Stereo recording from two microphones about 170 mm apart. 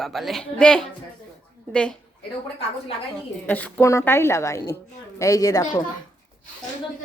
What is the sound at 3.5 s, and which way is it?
A woman's voice, 10° left (ahead or behind).